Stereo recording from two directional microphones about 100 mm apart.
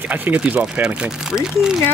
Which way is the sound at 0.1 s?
15° right (ahead or behind).